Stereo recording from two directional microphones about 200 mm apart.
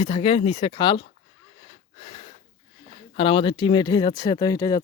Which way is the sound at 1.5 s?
30° left (ahead or behind).